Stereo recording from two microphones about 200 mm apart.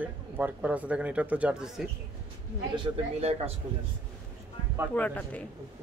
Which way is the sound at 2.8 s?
30° right (ahead or behind).